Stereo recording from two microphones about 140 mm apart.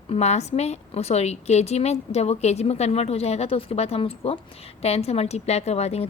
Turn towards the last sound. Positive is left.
turn(degrees=50)  # may be behind; listen again after turning